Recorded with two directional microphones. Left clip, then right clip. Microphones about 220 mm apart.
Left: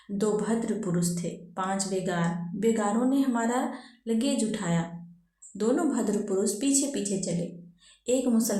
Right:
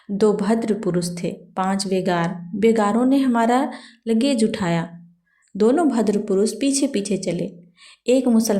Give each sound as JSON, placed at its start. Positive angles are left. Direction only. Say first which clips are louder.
{"t": 0.2, "sound": "speech", "louder": "right 9 dB", "side_deg": -35}